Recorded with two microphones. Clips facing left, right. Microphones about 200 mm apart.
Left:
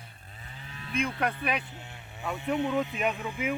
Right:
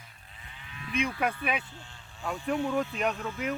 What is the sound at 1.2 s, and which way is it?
Speech, 5° right (ahead or behind).